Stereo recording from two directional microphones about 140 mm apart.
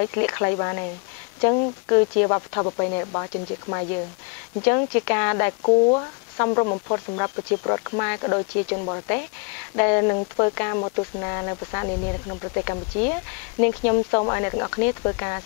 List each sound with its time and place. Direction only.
0.0 s speech: 20° left (ahead or behind)
4.6 s speech: 20° left (ahead or behind)
5.7 s speech: 30° left (ahead or behind)